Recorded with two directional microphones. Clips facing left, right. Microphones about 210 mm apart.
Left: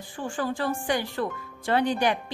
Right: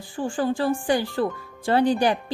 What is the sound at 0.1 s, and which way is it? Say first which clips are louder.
A woman's voice: right 5 dB; 30° right (ahead or behind).